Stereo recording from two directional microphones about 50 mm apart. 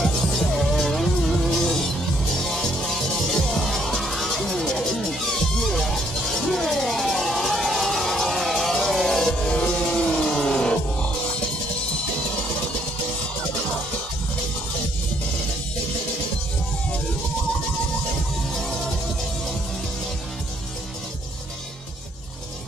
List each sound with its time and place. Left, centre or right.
0.0 s music: centre
9.4 s music: centre
18.5 s music: centre